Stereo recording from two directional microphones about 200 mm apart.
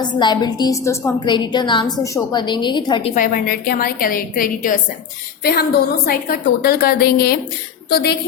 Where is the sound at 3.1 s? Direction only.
45° left (ahead or behind).